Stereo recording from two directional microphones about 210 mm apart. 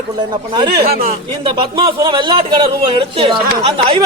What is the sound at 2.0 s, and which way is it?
Speech, 25° right (ahead or behind).